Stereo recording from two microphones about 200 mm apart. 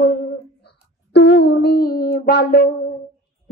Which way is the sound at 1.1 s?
55° left (ahead or behind).